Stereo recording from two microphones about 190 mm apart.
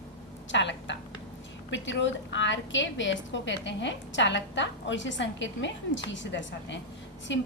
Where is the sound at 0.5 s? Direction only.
70° left (ahead or behind).